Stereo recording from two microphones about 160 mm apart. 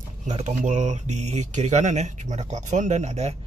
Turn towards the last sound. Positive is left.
turn(degrees=-45)  # may be behind; listen again after turning